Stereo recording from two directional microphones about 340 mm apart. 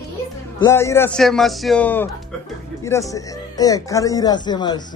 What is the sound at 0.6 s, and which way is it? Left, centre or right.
A man's voice, centre.